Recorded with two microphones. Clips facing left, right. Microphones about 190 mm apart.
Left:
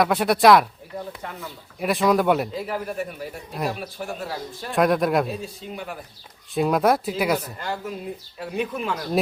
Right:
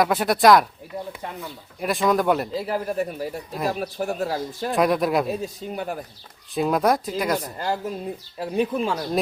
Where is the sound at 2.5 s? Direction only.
35° right (ahead or behind).